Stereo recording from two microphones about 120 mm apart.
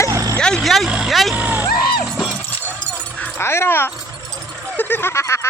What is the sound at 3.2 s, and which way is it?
Dog, 20° left (ahead or behind).